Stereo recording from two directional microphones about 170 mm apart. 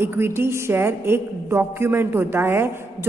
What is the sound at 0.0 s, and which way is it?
A woman's voice, 15° right (ahead or behind).